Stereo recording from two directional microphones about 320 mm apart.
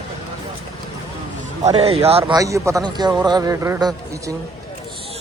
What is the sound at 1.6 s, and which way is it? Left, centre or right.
A man's voice, centre.